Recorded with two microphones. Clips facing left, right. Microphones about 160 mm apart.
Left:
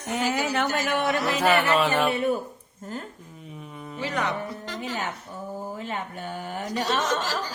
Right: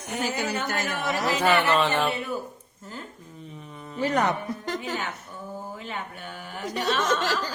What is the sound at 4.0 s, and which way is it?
Speech, 45° right (ahead or behind).